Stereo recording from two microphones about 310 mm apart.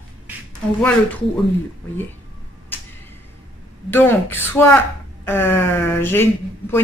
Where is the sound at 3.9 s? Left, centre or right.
Centre.